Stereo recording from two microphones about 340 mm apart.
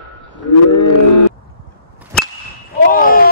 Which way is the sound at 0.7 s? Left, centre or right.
Left.